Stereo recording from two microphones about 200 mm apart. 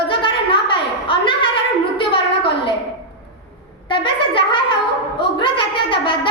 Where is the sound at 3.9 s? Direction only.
25° left (ahead or behind).